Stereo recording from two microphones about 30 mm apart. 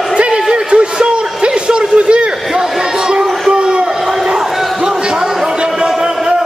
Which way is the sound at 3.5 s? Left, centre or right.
Right.